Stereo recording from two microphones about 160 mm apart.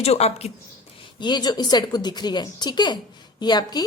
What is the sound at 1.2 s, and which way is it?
A woman's voice, 25° left (ahead or behind).